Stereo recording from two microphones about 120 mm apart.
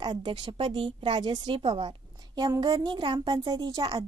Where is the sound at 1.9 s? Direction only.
35° right (ahead or behind).